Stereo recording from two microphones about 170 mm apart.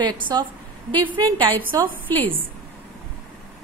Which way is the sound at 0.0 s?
25° right (ahead or behind).